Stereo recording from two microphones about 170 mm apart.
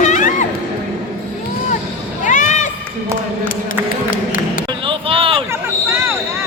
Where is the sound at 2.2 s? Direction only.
50° left (ahead or behind).